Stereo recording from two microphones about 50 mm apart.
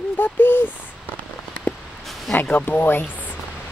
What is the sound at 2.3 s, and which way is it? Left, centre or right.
Speech, left.